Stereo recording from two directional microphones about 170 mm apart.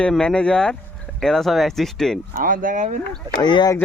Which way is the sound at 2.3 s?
55° right (ahead or behind).